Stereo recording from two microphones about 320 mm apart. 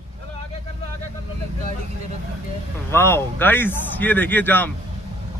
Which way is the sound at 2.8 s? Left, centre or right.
Centre.